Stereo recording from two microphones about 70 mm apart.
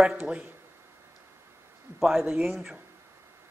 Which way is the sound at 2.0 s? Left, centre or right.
Centre.